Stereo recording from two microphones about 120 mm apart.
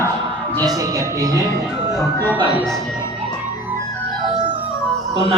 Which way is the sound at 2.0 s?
20° left (ahead or behind).